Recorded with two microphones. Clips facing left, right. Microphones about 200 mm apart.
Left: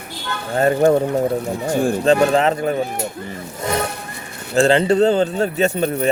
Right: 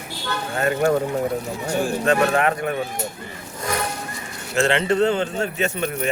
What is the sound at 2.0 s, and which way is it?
Speech, 30° left (ahead or behind).